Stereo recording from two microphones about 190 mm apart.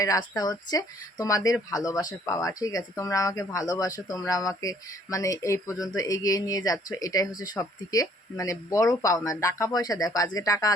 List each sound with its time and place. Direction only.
0.0 s speech: 20° left (ahead or behind)